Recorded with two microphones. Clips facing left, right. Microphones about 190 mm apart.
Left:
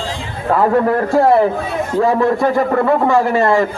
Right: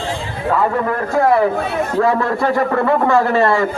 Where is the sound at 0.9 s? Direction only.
25° left (ahead or behind).